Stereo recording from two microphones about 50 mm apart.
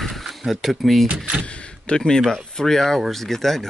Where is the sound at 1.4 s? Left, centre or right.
Left.